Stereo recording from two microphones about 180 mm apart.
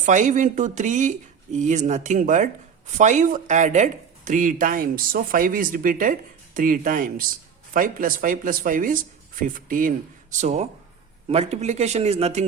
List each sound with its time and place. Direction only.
0.0 s speech: 45° right (ahead or behind)
10.3 s speech: 40° right (ahead or behind)